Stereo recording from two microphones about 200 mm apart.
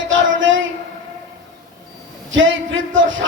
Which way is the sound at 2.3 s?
70° right (ahead or behind).